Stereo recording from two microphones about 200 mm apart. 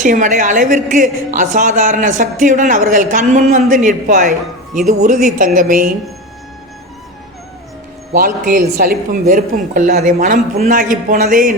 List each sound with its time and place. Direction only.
0.0 s a woman's voice: 40° right (ahead or behind)
8.1 s speech: 45° right (ahead or behind)